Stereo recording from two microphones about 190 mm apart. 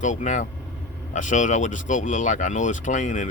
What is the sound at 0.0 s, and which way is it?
Speech, 40° left (ahead or behind).